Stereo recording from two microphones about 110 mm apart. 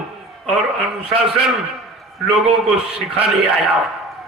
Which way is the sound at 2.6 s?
5° right (ahead or behind).